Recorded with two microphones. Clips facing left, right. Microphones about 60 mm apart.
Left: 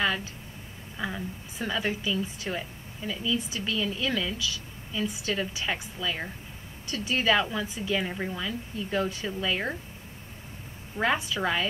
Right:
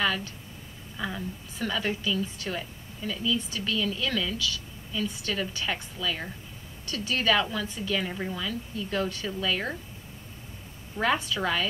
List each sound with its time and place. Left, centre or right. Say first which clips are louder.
0.9 s a woman's voice: even; centre
11.1 s a woman's voice: even; centre